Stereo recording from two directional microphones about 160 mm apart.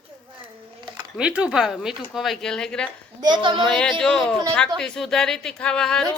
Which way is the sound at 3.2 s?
30° right (ahead or behind).